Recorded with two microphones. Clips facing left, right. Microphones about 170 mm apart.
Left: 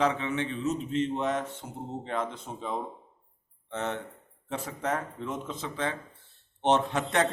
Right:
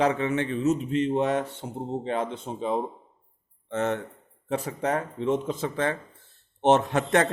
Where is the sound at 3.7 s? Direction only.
50° right (ahead or behind).